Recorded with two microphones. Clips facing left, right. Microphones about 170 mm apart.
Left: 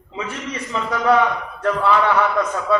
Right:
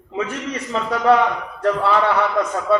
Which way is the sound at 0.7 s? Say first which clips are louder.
Right 1 dB; 35° right (ahead or behind).